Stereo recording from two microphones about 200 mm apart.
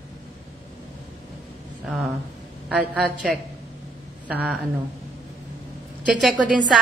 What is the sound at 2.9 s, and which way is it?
A woman's voice, centre (ahead or behind).